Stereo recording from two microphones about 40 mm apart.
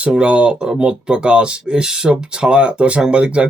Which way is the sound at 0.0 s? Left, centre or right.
Right.